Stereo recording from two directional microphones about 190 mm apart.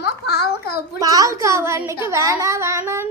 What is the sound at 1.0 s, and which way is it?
A woman's voice, 20° right (ahead or behind).